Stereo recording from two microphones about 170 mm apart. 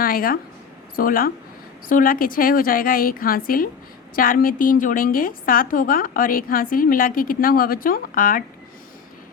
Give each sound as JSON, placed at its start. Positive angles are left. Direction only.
{"t": 0.0, "sound": "a woman's voice", "side_deg": 60}